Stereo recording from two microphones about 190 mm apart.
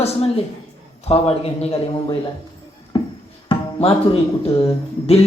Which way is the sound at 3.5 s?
30° left (ahead or behind).